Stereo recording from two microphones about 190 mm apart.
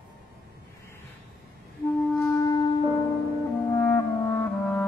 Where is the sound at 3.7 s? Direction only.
15° left (ahead or behind).